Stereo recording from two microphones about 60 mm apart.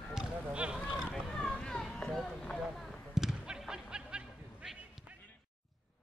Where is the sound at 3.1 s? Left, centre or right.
Centre.